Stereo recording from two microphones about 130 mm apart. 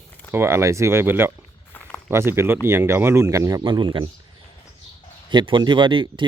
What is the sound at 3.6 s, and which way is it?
Speech, 35° right (ahead or behind).